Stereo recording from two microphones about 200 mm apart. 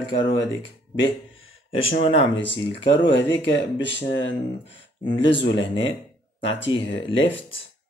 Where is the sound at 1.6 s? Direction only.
30° left (ahead or behind).